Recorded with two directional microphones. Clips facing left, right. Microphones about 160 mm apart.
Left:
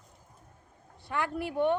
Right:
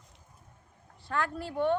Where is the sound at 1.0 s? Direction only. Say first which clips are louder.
Left 1 dB; 15° left (ahead or behind).